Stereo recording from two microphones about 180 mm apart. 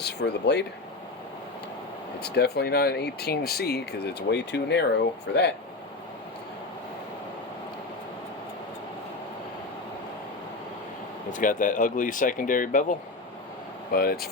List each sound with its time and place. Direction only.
0.0 s speech: 70° left (ahead or behind)
2.2 s speech: 65° left (ahead or behind)
11.3 s speech: 45° left (ahead or behind)